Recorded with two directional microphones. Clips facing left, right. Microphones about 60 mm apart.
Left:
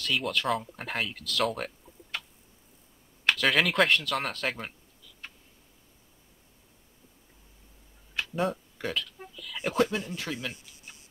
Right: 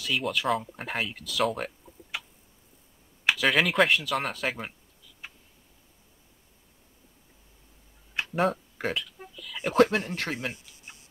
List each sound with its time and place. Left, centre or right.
0.0 s speech: centre
3.3 s speech: centre
8.2 s a sound: right
9.2 s speech: centre
9.8 s speech: right
10.5 s speech: centre